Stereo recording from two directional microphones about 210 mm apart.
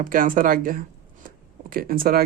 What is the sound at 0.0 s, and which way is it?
Speech, 40° right (ahead or behind).